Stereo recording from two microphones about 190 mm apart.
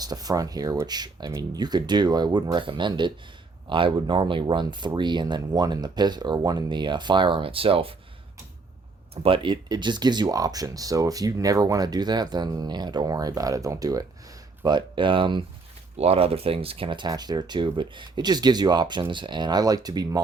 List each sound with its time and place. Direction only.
0.0 s speech: 20° right (ahead or behind)
9.2 s speech: 25° right (ahead or behind)